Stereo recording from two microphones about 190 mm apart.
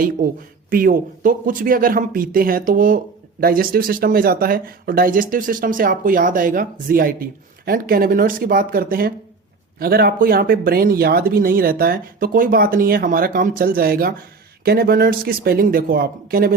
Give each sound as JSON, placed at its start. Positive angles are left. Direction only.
{"t": 0.7, "sound": "speech", "side_deg": -50}